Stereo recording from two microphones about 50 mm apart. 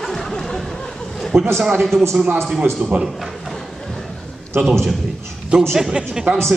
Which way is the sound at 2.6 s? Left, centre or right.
Right.